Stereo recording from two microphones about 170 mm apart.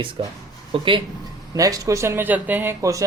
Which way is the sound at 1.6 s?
20° right (ahead or behind).